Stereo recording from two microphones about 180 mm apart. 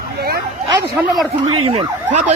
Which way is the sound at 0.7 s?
20° right (ahead or behind).